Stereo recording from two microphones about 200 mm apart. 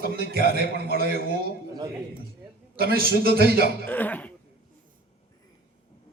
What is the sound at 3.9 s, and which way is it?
Cough, 10° left (ahead or behind).